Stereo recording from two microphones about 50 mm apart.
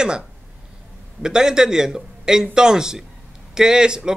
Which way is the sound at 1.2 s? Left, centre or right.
Centre.